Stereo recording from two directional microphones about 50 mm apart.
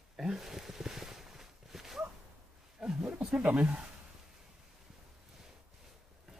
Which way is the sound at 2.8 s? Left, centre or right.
Centre.